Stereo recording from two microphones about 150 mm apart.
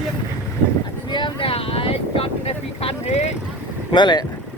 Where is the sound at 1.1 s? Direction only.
35° left (ahead or behind).